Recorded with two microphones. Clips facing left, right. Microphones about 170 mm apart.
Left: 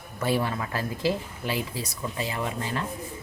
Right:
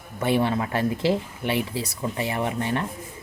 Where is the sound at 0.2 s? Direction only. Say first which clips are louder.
Right 4 dB; 25° right (ahead or behind).